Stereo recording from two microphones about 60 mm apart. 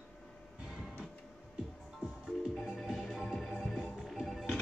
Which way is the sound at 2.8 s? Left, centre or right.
Centre.